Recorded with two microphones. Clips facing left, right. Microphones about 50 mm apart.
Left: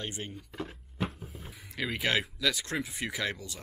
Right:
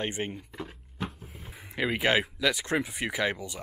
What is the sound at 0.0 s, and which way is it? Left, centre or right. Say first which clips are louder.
Speech: right 7 dB; right.